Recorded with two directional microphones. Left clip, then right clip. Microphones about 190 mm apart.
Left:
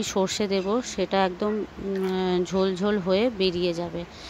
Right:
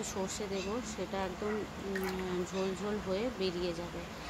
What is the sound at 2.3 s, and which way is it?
A woman's voice, 40° left (ahead or behind).